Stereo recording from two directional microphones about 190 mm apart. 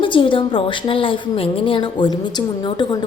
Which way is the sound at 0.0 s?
25° left (ahead or behind).